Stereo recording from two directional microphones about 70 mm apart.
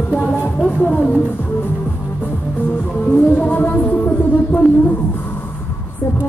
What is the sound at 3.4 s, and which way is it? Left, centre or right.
Music, left.